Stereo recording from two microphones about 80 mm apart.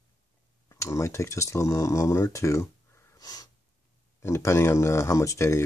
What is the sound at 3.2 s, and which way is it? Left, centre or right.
Snort, left.